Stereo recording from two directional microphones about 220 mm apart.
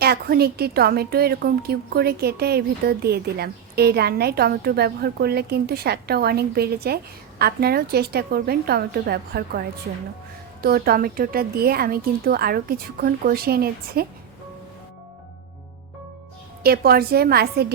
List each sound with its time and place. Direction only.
0.0 s a woman's voice: 45° right (ahead or behind)
10.6 s a woman's voice: 45° right (ahead or behind)
16.6 s a woman's voice: 45° right (ahead or behind)